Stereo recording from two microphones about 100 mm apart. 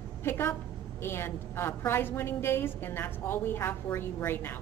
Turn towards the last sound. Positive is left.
turn(degrees=20)  # may be behind; listen again after turning